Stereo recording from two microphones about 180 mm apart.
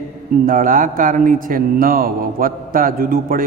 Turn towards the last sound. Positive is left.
turn(degrees=-50)  # may be behind; listen again after turning